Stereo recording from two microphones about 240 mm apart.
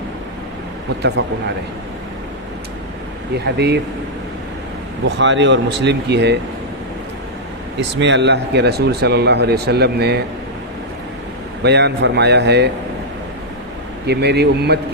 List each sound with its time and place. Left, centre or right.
1.2 s speech: right
3.3 s speech: right
5.0 s speech: right
7.8 s speech: right
11.6 s speech: right
14.1 s speech: right